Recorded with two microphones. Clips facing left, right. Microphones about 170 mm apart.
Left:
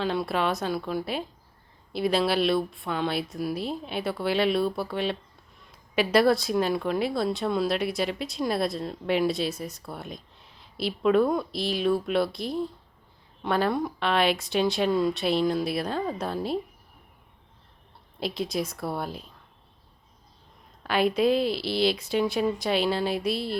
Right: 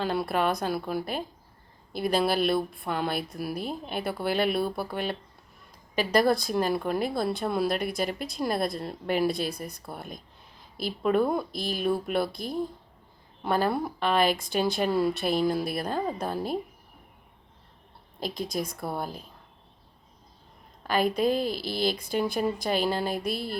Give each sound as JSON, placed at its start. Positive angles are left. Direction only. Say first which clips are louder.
{"t": 0.0, "sound": "speech", "louder": "even", "side_deg": -5}
{"t": 18.3, "sound": "speech", "louder": "left 2 dB", "side_deg": 0}
{"t": 20.8, "sound": "speech", "louder": "left 2 dB", "side_deg": 0}
{"t": 21.3, "sound": "speech", "louder": "left 3 dB", "side_deg": -45}
{"t": 21.8, "sound": "speech", "louder": "left 3 dB", "side_deg": 0}